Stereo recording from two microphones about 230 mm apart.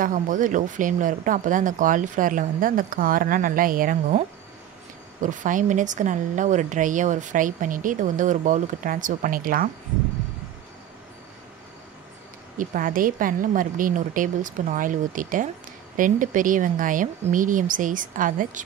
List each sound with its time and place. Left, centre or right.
0.0 s a woman's voice: right
5.2 s a woman's voice: right
12.5 s a woman's voice: right